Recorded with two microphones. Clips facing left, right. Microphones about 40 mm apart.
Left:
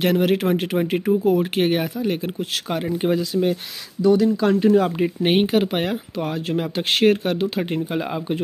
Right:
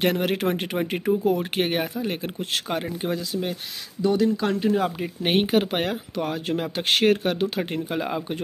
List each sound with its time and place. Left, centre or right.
0.0 s speech: centre
4.0 s speech: right
4.5 s speech: centre